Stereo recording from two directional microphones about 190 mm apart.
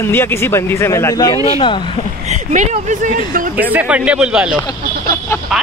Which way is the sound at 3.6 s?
10° right (ahead or behind).